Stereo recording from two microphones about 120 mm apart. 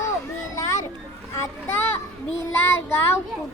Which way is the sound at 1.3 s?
20° left (ahead or behind).